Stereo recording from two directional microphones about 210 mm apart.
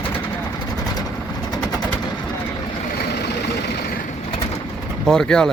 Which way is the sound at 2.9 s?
55° left (ahead or behind).